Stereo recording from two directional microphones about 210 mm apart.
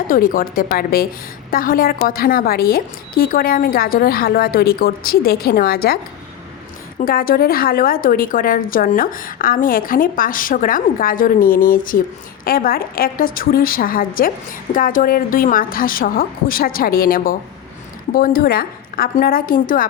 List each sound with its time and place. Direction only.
0.1 s a woman's voice: 40° left (ahead or behind)
7.0 s a woman's voice: 45° left (ahead or behind)